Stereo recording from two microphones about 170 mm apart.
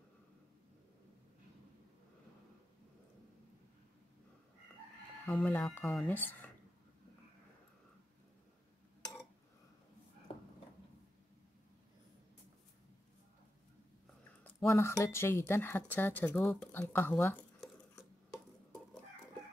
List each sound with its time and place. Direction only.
5.2 s speech: 10° left (ahead or behind)
10.3 s a sound: 30° left (ahead or behind)
14.7 s speech: 15° left (ahead or behind)